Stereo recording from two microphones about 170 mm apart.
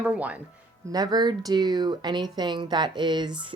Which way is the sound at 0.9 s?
25° right (ahead or behind).